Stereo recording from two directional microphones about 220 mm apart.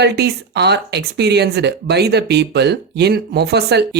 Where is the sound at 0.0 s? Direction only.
50° right (ahead or behind).